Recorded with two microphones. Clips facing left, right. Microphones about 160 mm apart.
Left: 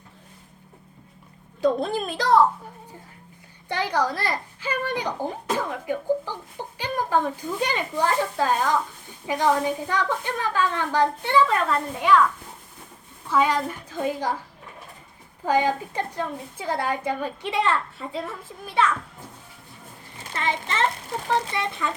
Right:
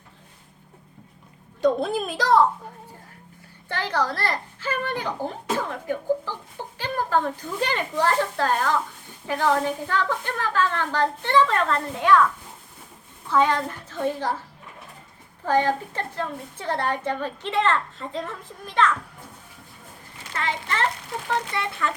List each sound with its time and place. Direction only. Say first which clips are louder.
1.6 s a child's voice: right 1 dB; centre (ahead or behind)
3.7 s a woman's voice: left 1 dB; 15° left (ahead or behind)
13.2 s a woman's voice: right 1 dB; 10° left (ahead or behind)
15.4 s a woman's voice: even; 10° left (ahead or behind)
20.3 s speech: left 1 dB; 20° left (ahead or behind)